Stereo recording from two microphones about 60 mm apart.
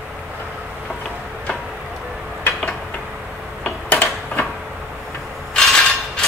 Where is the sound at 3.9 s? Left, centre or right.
Left.